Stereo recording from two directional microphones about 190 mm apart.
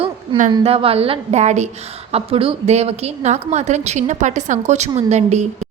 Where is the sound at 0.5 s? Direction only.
30° right (ahead or behind).